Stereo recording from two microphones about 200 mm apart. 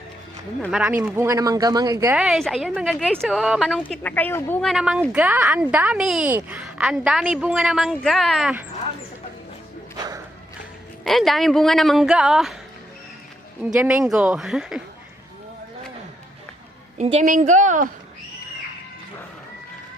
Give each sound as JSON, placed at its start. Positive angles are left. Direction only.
{"t": 0.6, "sound": "speech", "side_deg": -5}
{"t": 2.1, "sound": "a woman's voice", "side_deg": -5}
{"t": 3.8, "sound": "a woman's voice", "side_deg": 10}
{"t": 4.6, "sound": "a woman's voice", "side_deg": 0}
{"t": 11.0, "sound": "a woman's voice", "side_deg": 0}
{"t": 13.6, "sound": "a woman's voice", "side_deg": -5}
{"t": 17.0, "sound": "a woman's voice", "side_deg": -35}